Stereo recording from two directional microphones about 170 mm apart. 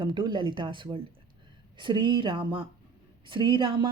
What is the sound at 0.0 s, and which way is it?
Speech, 25° right (ahead or behind).